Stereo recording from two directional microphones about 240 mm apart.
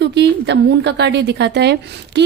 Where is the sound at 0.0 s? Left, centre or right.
Right.